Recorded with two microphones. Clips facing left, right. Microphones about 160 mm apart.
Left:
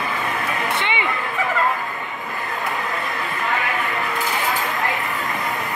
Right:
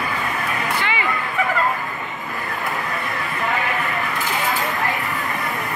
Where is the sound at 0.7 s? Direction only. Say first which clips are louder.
Right 1 dB; 25° left (ahead or behind).